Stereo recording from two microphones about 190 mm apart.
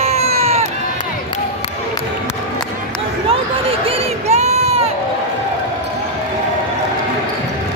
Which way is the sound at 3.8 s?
30° right (ahead or behind).